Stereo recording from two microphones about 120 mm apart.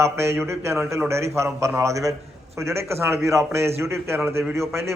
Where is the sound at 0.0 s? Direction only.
20° right (ahead or behind).